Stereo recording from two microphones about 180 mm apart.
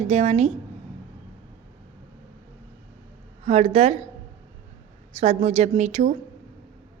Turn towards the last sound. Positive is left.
turn(degrees=-40)  # may be behind; listen again after turning